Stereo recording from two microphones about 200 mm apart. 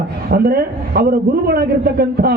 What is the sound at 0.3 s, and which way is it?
A man's voice, 50° right (ahead or behind).